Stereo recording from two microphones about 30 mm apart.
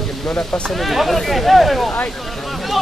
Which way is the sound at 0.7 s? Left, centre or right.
Centre.